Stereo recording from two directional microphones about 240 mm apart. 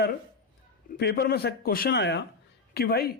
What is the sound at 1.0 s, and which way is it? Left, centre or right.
Speech, left.